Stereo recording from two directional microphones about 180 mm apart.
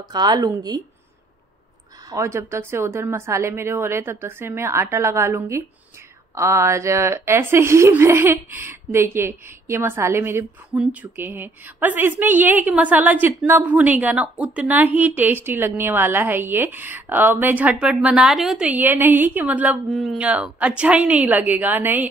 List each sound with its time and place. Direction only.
0.1 s a woman's voice: 20° right (ahead or behind)
2.0 s speech: 15° right (ahead or behind)